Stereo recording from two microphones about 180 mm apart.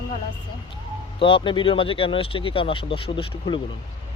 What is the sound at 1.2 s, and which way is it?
Speech, 30° left (ahead or behind).